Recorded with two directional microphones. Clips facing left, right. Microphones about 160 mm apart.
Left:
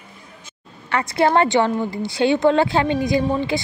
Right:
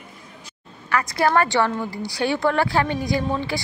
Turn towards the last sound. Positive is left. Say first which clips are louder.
# left 4 dB
turn(degrees=20)  # may be behind; listen again after turning